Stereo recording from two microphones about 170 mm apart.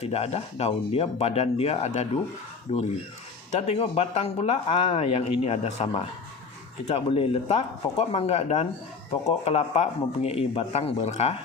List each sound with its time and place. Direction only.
0.0 s speech: 40° left (ahead or behind)